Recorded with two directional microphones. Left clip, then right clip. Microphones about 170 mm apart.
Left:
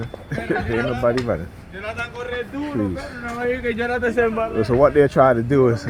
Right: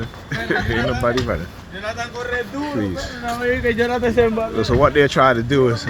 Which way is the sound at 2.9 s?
65° left (ahead or behind).